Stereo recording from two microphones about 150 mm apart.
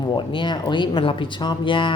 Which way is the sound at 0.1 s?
35° left (ahead or behind).